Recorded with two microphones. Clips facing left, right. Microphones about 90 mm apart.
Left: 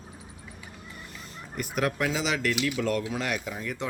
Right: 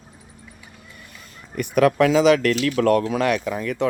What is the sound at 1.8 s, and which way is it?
Speech, 90° right.